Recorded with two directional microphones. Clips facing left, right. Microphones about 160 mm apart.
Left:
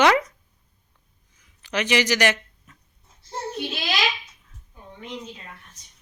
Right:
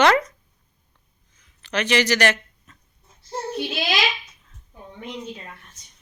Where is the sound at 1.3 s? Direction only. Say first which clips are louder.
Right 1 dB; 10° left (ahead or behind).